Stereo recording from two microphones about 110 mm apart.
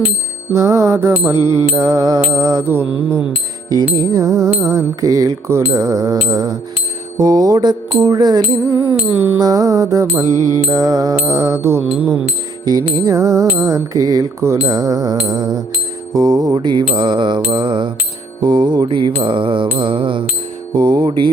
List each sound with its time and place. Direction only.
0.5 s music: 25° right (ahead or behind)
4.1 s music: 30° right (ahead or behind)
9.1 s speech: 15° right (ahead or behind)
9.4 s music: 35° right (ahead or behind)
11.9 s speech: 15° right (ahead or behind)
12.6 s music: 35° right (ahead or behind)
16.1 s mantra: 35° right (ahead or behind)
20.7 s music: 40° right (ahead or behind)